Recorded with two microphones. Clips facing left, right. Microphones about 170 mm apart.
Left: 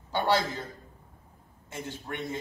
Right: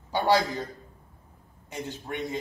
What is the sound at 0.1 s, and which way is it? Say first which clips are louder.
Speech: right 3 dB; 15° right (ahead or behind).